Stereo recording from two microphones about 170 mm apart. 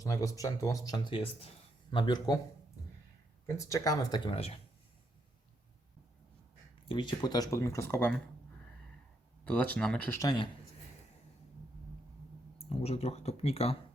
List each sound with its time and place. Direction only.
0.0 s speech: 20° left (ahead or behind)
3.4 s speech: 20° left (ahead or behind)
4.3 s speech: 35° left (ahead or behind)
6.8 s speech: 30° left (ahead or behind)
9.4 s speech: 5° left (ahead or behind)
10.2 s speech: 25° left (ahead or behind)
12.6 s speech: 35° left (ahead or behind)